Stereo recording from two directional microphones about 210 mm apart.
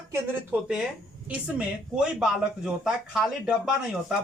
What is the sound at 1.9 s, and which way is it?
Speech, 5° right (ahead or behind).